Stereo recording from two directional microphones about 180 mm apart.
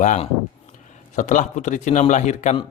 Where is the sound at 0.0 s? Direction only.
45° left (ahead or behind).